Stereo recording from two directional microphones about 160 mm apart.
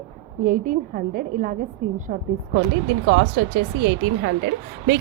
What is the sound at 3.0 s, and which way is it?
Speech, 90° right.